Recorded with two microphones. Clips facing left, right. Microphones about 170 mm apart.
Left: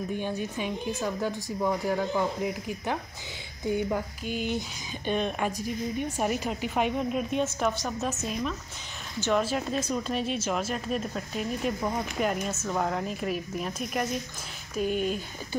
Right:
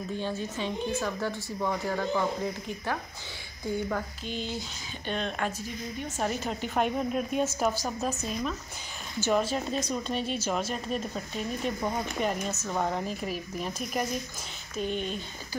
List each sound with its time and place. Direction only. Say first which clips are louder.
0.1 s a woman's voice: left 1 dB; 15° left (ahead or behind)